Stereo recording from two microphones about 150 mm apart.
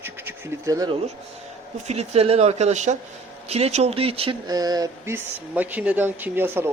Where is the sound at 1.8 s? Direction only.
45° right (ahead or behind).